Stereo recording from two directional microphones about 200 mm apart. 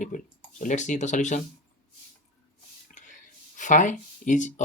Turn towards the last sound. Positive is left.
turn(degrees=40)  # may be behind; listen again after turning